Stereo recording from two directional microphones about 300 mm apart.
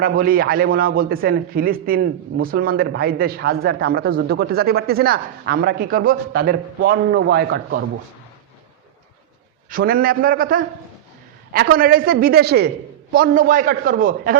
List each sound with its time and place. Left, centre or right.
0.0 s a man's voice: right
9.6 s a woman's voice: right